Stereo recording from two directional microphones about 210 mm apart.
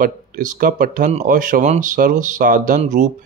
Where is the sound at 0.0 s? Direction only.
40° right (ahead or behind).